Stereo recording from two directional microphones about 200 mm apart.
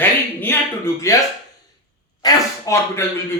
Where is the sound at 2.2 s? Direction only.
15° left (ahead or behind).